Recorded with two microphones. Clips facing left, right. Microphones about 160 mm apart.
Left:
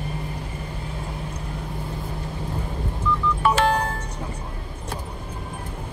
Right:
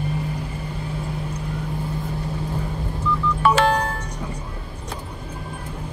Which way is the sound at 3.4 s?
90° right.